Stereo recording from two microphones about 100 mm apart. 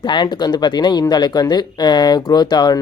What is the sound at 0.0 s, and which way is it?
Speech, 50° left (ahead or behind).